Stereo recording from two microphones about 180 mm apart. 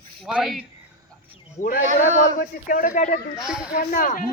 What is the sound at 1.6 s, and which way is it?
A man's voice, 50° left (ahead or behind).